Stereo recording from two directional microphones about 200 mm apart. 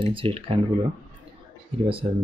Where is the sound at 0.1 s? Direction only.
25° right (ahead or behind).